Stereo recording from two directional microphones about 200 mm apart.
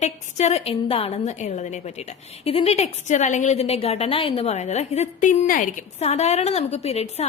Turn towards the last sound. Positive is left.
turn(degrees=30)  # may be behind; listen again after turning